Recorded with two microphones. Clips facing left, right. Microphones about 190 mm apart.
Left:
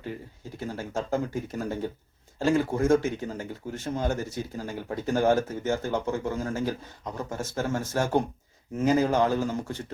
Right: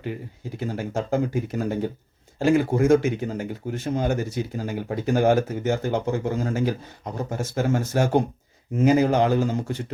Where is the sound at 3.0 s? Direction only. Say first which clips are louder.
Right 5 dB; 70° right (ahead or behind).